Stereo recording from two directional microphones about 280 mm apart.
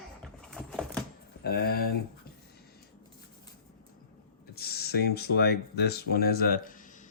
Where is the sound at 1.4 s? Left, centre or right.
Left.